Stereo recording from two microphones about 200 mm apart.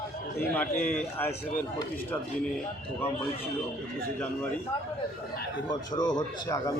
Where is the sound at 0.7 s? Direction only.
40° left (ahead or behind).